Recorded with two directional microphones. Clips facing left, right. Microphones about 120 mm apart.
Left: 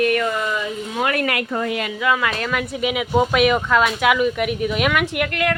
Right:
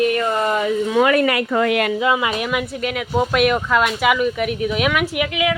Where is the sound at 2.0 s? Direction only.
20° right (ahead or behind).